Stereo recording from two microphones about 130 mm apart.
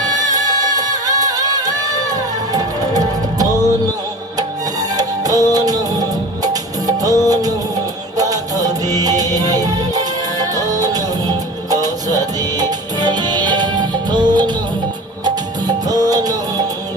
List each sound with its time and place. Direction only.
0.0 s music: 30° right (ahead or behind)
4.9 s music: 30° right (ahead or behind)
15.9 s music: 30° right (ahead or behind)